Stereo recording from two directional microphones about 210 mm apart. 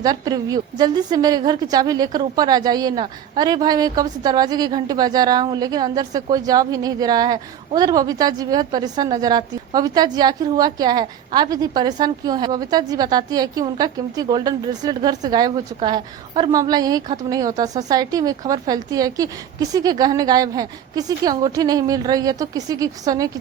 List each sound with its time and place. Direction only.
0.0 s a woman's voice: 15° right (ahead or behind)